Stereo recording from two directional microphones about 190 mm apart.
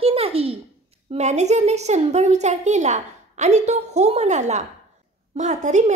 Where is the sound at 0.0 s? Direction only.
30° right (ahead or behind).